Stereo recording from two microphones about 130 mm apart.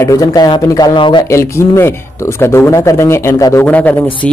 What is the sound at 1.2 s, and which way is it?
A man's voice, 20° left (ahead or behind).